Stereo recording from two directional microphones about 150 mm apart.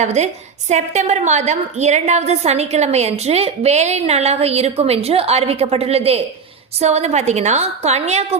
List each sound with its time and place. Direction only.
0.0 s a woman's voice: 50° right (ahead or behind)